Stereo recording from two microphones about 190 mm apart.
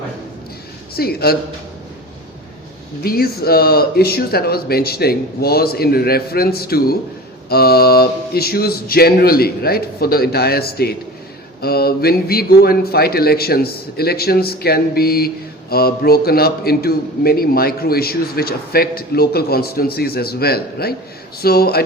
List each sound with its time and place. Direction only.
0.9 s a man's voice: 55° left (ahead or behind)
3.0 s a man's voice: 55° left (ahead or behind)